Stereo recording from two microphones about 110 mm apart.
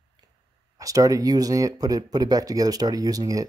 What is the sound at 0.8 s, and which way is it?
Speech, 30° right (ahead or behind).